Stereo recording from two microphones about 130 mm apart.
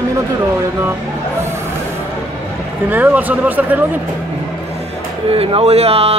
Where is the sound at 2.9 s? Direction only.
15° right (ahead or behind).